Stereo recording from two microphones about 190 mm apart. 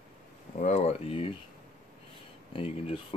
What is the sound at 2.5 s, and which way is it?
Speech, 30° left (ahead or behind).